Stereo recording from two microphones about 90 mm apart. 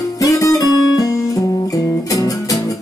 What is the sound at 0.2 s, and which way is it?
Music, 40° left (ahead or behind).